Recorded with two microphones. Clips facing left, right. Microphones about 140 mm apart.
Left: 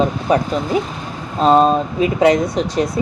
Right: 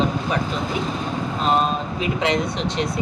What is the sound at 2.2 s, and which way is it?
Speech, 40° left (ahead or behind).